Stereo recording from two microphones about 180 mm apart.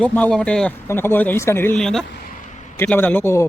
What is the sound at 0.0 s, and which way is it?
A man's voice, 10° left (ahead or behind).